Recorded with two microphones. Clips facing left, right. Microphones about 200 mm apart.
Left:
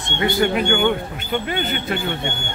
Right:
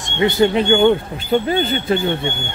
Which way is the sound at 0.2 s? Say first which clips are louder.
Right 4 dB; 20° right (ahead or behind).